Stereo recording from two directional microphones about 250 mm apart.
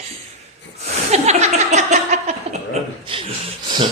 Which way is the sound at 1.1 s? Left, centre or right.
Right.